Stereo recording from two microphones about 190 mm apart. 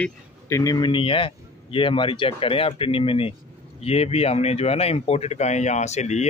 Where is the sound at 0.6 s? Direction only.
20° left (ahead or behind).